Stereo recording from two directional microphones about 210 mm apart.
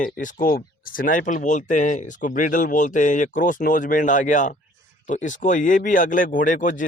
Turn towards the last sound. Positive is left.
turn(degrees=40)  # may be behind; listen again after turning